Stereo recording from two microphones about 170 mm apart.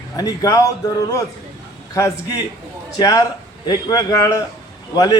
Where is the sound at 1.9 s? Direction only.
20° left (ahead or behind).